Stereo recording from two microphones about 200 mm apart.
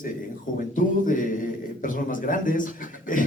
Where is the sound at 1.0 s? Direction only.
40° left (ahead or behind).